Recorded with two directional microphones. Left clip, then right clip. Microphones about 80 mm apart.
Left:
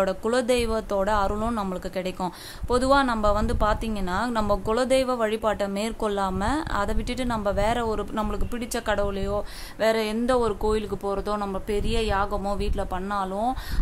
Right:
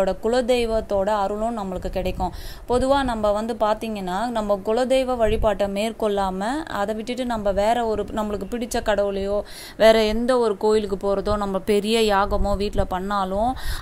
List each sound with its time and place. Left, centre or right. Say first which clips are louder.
0.0 s a woman's voice: right 3 dB; centre
2.7 s a woman's voice: right 1 dB; centre
9.8 s speech: right 8 dB; right
10.2 s speech: right 4 dB; right
10.7 s speech: right 6 dB; right
11.5 s a woman's voice: right 7 dB; right
12.3 s speech: right 5 dB; right
13.3 s speech: right 4 dB; right